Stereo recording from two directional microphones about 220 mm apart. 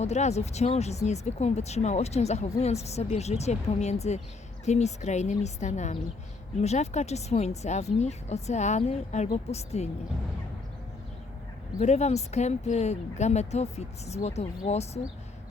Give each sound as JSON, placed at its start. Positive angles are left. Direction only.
{"t": 0.0, "sound": "a woman's voice", "side_deg": 30}
{"t": 11.8, "sound": "speech", "side_deg": 30}